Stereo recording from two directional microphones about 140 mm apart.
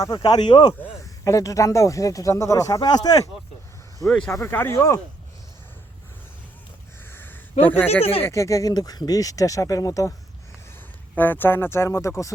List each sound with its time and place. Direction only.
0.0 s speech: 30° left (ahead or behind)
4.0 s speech: centre (ahead or behind)
4.3 s speech: 15° left (ahead or behind)
7.1 s a sound: 15° left (ahead or behind)
7.6 s speech: 15° left (ahead or behind)
11.1 s speech: 15° left (ahead or behind)